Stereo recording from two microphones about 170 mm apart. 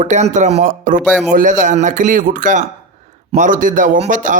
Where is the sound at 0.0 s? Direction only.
45° right (ahead or behind).